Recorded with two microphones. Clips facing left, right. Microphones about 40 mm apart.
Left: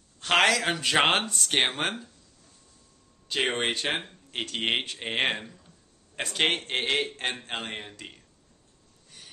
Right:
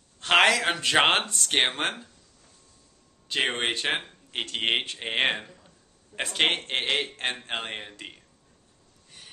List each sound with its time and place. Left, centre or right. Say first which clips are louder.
0.2 s speech: right 2 dB; centre
3.3 s speech: even; centre